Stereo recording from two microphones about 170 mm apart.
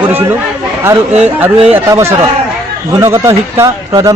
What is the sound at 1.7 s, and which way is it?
Speech, 15° right (ahead or behind).